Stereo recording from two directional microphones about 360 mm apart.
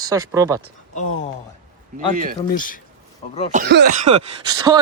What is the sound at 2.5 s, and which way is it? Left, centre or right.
Speech, left.